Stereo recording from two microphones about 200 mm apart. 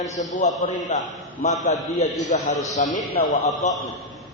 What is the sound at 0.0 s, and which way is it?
Speech, 15° left (ahead or behind).